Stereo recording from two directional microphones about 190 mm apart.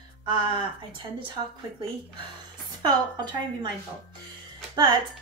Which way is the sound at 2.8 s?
20° right (ahead or behind).